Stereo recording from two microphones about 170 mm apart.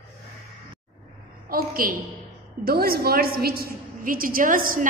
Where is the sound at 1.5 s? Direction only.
60° right (ahead or behind).